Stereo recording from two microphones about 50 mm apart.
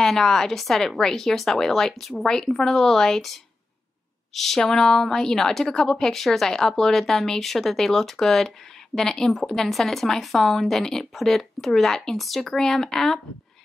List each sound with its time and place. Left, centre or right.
0.0 s a woman's voice: centre